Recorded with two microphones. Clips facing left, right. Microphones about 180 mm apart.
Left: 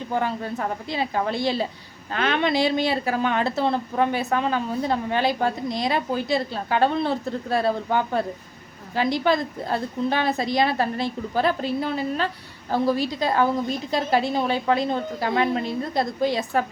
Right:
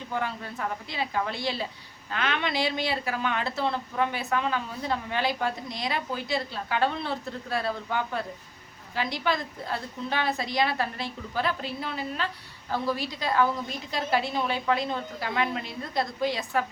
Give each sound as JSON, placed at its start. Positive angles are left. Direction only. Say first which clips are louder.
{"t": 0.1, "sound": "a woman's voice", "louder": "left 6 dB", "side_deg": 35}